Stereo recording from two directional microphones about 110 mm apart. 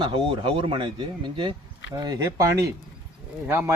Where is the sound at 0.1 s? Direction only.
50° right (ahead or behind).